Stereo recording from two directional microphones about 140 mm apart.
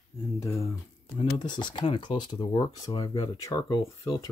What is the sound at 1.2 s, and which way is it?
Speech, 30° left (ahead or behind).